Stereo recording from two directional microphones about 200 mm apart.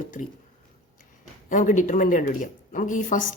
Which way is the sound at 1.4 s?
40° left (ahead or behind).